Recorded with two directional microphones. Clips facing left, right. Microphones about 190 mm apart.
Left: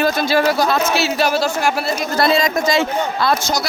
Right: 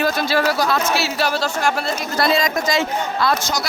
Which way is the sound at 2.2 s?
25° left (ahead or behind).